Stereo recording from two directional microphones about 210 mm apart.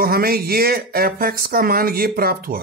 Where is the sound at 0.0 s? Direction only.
45° right (ahead or behind).